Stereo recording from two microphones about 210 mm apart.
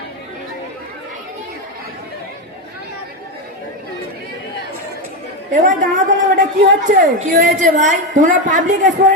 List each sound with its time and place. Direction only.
5.5 s a woman's voice: 40° right (ahead or behind)